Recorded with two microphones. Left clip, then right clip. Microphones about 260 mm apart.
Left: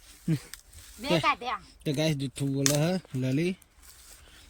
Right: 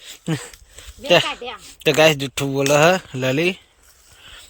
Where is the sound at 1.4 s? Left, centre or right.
Left.